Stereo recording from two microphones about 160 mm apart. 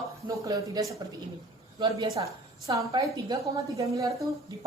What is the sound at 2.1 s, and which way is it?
A woman's voice, 20° right (ahead or behind).